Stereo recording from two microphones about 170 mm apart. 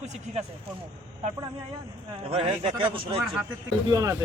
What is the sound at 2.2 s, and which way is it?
Speech, 35° right (ahead or behind).